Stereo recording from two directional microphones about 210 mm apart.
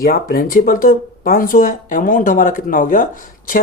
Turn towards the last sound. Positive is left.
turn(degrees=40)  # may be behind; listen again after turning